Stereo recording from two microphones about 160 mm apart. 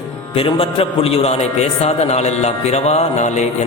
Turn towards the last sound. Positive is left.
turn(degrees=45)  # may be behind; listen again after turning